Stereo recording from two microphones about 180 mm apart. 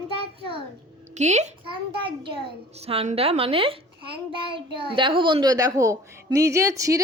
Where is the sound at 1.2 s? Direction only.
40° right (ahead or behind).